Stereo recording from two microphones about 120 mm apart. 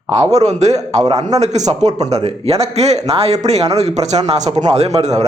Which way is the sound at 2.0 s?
65° right (ahead or behind).